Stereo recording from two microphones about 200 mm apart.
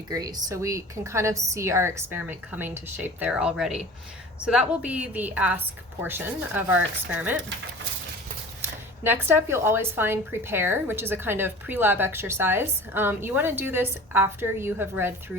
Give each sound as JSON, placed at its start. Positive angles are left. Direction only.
{"t": 0.1, "sound": "a woman's voice", "side_deg": -20}
{"t": 9.0, "sound": "a woman's voice", "side_deg": -10}